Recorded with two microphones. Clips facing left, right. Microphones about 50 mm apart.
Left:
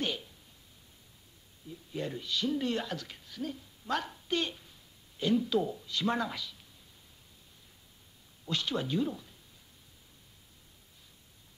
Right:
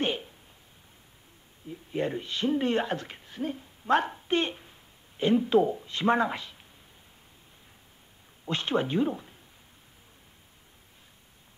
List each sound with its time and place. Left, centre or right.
0.0 s a sound: right
1.7 s speech: right
8.5 s speech: right